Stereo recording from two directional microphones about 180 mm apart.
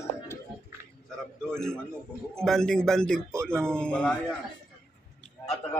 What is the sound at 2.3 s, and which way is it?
A man's voice, 5° left (ahead or behind).